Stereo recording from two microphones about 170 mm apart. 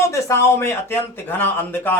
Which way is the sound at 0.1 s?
15° left (ahead or behind).